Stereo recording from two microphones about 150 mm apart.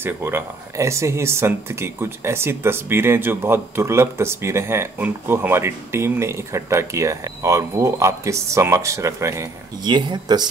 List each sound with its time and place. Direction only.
0.0 s speech: 15° right (ahead or behind)